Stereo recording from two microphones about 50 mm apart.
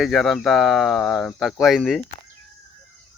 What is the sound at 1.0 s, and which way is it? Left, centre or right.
Speech, centre.